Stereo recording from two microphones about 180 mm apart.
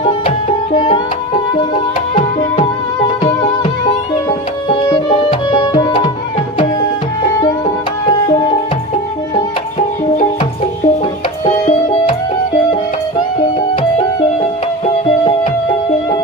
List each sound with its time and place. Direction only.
0.3 s music: 40° left (ahead or behind)
0.9 s music: 25° left (ahead or behind)
8.0 s music: 25° left (ahead or behind)
9.7 s music: 35° left (ahead or behind)
15.0 s music: 30° left (ahead or behind)